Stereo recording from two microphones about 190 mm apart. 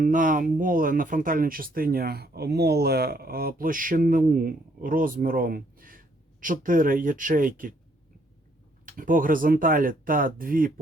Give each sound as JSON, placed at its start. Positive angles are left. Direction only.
{"t": 0.0, "sound": "speech", "side_deg": -45}
{"t": 8.9, "sound": "speech", "side_deg": -45}